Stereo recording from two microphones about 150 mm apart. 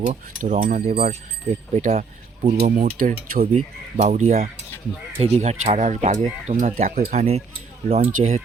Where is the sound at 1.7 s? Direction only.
50° right (ahead or behind); by 3.5 s 70° right (ahead or behind).